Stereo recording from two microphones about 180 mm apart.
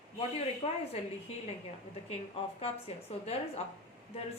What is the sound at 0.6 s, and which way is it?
Speech, 35° left (ahead or behind).